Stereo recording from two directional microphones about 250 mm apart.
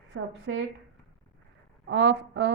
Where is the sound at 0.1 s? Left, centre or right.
Right.